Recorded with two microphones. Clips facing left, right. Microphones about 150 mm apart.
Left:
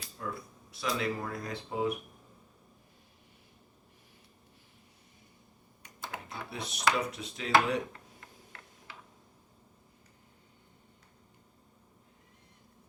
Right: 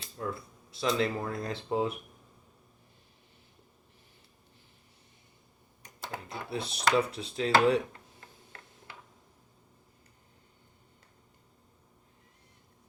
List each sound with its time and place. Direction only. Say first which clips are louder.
0.7 s speech: right 4 dB; 25° right (ahead or behind)
5.8 s speech: right 2 dB; 35° right (ahead or behind)